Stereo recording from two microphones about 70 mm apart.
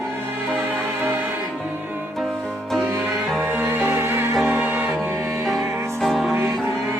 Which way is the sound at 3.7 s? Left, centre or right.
Right.